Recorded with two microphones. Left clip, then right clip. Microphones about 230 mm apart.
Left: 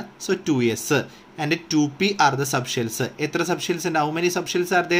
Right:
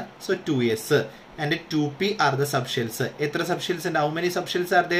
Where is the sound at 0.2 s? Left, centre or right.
Left.